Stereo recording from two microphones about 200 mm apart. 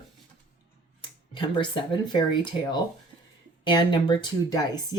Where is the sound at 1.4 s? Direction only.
25° left (ahead or behind).